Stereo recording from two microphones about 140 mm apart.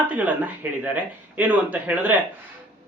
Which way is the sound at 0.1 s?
10° right (ahead or behind).